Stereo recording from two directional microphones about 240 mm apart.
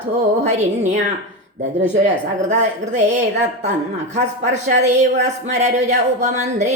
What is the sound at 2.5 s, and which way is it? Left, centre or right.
Speech, right.